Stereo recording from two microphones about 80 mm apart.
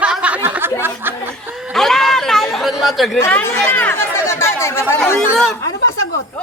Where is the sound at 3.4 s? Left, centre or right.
Left.